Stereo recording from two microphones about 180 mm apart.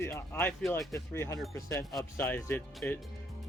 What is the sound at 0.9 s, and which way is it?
Speech, 15° left (ahead or behind).